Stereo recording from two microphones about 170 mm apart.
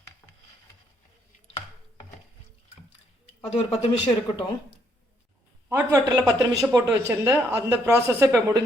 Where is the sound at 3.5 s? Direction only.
35° left (ahead or behind).